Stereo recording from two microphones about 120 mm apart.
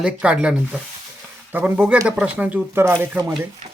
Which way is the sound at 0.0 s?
10° right (ahead or behind).